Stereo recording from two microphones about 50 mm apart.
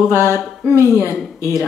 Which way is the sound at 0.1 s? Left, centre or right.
Left.